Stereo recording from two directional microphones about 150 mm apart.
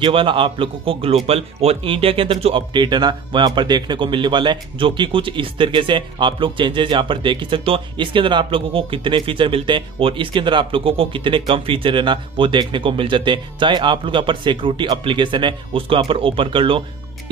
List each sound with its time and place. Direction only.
0.0 s speech: 35° right (ahead or behind)